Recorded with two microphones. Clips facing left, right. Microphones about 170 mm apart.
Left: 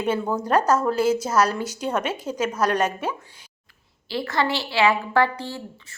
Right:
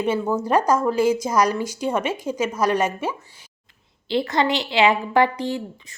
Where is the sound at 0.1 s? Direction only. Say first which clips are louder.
Even; 10° right (ahead or behind).